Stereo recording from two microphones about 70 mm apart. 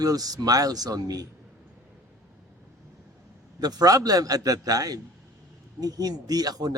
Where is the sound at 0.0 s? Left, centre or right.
Right.